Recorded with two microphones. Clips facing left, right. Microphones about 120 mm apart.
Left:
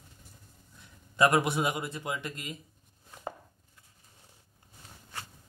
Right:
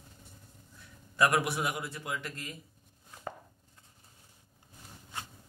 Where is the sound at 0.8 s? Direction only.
25° left (ahead or behind).